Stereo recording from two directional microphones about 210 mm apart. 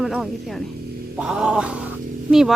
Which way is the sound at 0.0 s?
Centre (ahead or behind).